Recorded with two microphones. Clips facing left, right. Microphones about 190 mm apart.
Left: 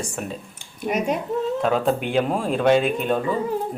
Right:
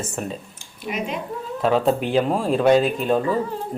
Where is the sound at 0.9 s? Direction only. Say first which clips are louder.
Left 5 dB; 45° left (ahead or behind).